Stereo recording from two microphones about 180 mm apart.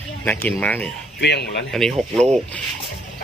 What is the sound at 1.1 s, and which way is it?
Speech, 70° left (ahead or behind).